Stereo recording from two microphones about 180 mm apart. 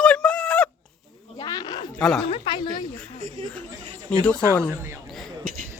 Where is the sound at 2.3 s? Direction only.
30° left (ahead or behind).